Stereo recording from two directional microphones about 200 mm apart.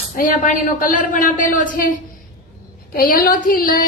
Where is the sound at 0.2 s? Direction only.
40° left (ahead or behind).